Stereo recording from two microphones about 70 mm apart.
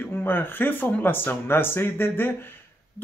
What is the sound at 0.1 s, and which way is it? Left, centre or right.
Speech, left.